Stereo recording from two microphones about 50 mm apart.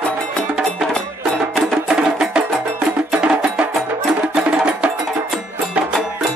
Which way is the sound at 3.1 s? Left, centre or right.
Centre.